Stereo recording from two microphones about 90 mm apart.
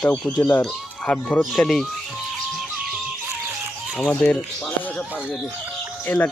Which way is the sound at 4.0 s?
15° left (ahead or behind).